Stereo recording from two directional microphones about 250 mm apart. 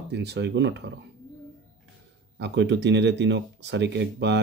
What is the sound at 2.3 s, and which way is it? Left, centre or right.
Speech, right.